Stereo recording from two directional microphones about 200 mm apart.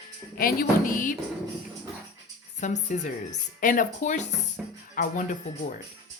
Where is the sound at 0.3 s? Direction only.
45° left (ahead or behind).